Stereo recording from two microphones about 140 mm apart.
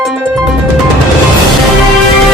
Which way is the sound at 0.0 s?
5° right (ahead or behind).